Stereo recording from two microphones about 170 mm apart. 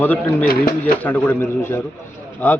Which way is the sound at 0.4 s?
60° left (ahead or behind).